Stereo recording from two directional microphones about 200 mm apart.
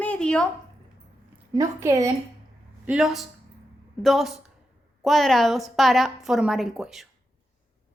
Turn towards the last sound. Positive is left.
turn(degrees=0)  # may be behind; listen again after turning